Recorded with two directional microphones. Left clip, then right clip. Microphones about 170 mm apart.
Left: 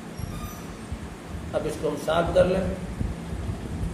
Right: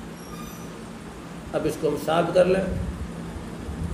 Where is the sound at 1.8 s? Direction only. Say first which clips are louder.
Right 5 dB; 35° right (ahead or behind).